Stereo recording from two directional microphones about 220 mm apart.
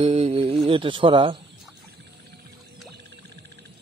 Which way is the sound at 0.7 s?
25° right (ahead or behind).